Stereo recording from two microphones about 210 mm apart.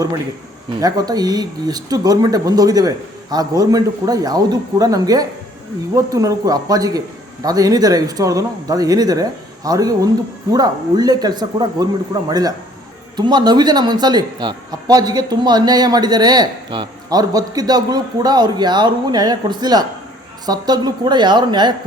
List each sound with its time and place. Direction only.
0.8 s speech: 20° right (ahead or behind)